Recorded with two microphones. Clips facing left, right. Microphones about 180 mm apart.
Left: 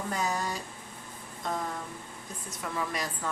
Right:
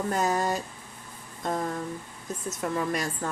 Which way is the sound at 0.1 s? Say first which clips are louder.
Right 5 dB; 50° right (ahead or behind).